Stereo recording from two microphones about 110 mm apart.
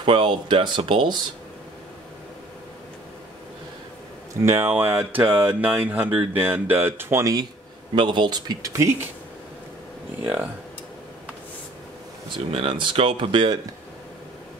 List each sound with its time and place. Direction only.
0.0 s speech: 45° right (ahead or behind)
4.3 s speech: 25° right (ahead or behind)
5.1 s a sound: 15° right (ahead or behind)
7.9 s speech: 45° right (ahead or behind); by 8.9 s 30° right (ahead or behind)
10.2 s speech: 15° right (ahead or behind)
12.5 s speech: 60° right (ahead or behind)